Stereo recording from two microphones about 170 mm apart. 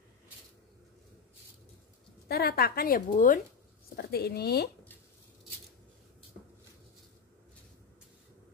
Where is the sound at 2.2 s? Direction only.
65° left (ahead or behind); by 3.3 s 50° left (ahead or behind).